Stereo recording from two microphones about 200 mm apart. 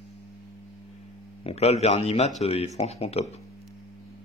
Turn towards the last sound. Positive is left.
turn(degrees=30)  # may be behind; listen again after turning